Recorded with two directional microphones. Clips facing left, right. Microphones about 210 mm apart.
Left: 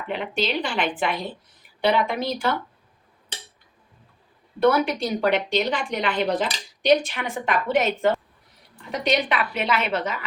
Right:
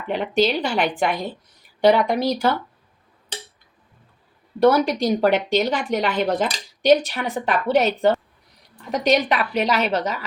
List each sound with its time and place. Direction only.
0.4 s a woman's voice: 45° right (ahead or behind)
4.6 s a woman's voice: 40° right (ahead or behind)